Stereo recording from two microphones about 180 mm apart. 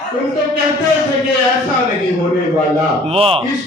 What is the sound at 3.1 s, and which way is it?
Speech, 30° right (ahead or behind).